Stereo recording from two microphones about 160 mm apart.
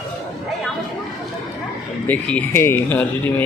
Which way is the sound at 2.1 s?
10° left (ahead or behind).